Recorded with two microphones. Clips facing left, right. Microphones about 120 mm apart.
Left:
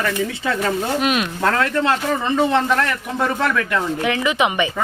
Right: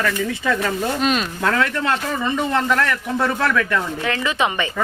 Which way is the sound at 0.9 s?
5° left (ahead or behind).